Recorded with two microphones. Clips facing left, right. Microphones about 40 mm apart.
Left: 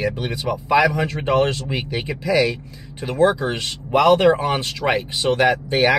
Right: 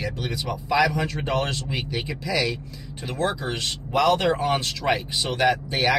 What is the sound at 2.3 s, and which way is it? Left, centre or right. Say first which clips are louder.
Speech: left 7 dB; centre.